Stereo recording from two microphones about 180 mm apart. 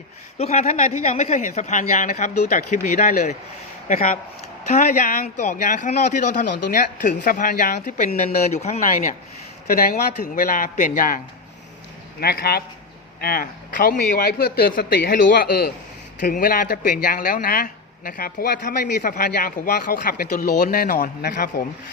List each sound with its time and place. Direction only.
0.3 s a woman's voice: 40° left (ahead or behind)
12.2 s a man's voice: 60° left (ahead or behind)